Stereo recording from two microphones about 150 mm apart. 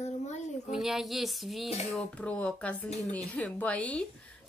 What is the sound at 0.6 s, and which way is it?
Speech, centre (ahead or behind).